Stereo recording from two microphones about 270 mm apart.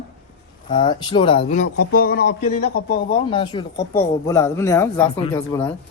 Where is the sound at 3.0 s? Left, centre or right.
Centre.